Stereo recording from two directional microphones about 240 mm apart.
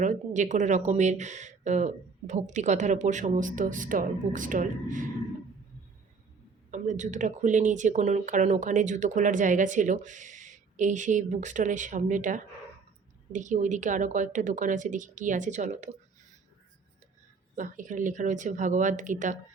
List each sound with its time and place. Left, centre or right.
0.0 s speech: right
6.7 s speech: right
17.6 s speech: right